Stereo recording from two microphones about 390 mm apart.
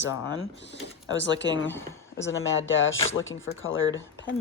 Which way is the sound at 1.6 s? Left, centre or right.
Centre.